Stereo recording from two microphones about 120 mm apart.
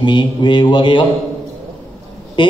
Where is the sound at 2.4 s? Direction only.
45° left (ahead or behind).